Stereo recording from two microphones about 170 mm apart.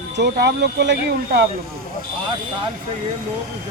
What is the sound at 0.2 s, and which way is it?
Speech, 75° right (ahead or behind).